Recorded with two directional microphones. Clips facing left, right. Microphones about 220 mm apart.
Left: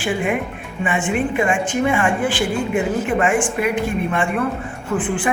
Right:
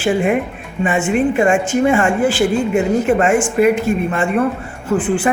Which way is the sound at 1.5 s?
45° right (ahead or behind).